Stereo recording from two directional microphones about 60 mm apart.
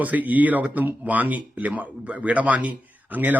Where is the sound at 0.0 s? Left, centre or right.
Right.